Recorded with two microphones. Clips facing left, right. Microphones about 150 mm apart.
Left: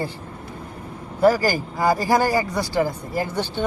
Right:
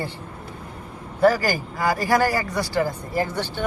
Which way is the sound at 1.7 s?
20° left (ahead or behind).